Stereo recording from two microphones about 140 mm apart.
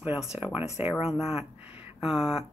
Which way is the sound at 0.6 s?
45° left (ahead or behind).